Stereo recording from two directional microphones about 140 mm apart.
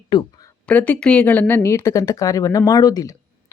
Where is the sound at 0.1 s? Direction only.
30° left (ahead or behind).